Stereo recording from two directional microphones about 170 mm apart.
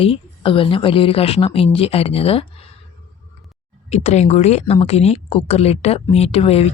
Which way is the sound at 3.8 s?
40° left (ahead or behind).